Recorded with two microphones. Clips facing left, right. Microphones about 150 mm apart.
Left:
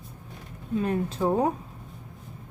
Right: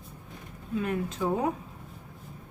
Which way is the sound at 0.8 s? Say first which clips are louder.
Left 3 dB; 35° left (ahead or behind).